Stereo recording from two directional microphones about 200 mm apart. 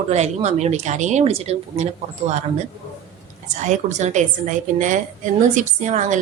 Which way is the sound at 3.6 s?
35° right (ahead or behind).